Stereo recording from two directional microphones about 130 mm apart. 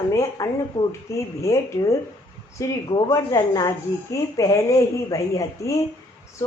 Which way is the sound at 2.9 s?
30° left (ahead or behind).